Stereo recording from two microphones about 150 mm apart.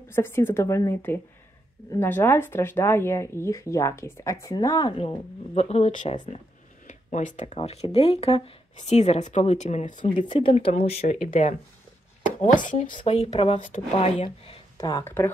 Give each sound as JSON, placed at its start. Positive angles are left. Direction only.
{"t": 0.1, "sound": "speech", "side_deg": 15}
{"t": 4.9, "sound": "speech", "side_deg": 40}
{"t": 10.2, "sound": "speech", "side_deg": 35}
{"t": 12.4, "sound": "speech", "side_deg": 60}
{"t": 13.0, "sound": "speech", "side_deg": 45}
{"t": 14.8, "sound": "speech", "side_deg": 25}